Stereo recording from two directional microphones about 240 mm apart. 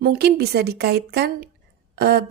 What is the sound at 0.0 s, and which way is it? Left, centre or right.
A woman's voice, right.